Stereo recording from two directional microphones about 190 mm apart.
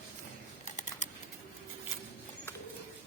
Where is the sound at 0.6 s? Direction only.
40° left (ahead or behind).